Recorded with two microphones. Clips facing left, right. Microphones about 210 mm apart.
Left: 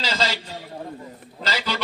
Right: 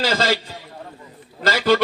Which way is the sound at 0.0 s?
50° right (ahead or behind).